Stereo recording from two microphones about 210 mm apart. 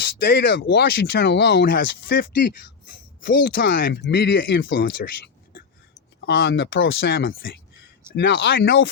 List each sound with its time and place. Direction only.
0.0 s speech: 50° left (ahead or behind)
5.9 s speech: 60° left (ahead or behind)